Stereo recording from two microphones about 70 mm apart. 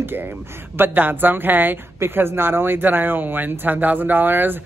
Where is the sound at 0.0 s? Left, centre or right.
Right.